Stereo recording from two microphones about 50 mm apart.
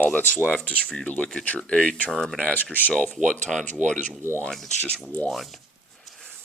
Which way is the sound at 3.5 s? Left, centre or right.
Centre.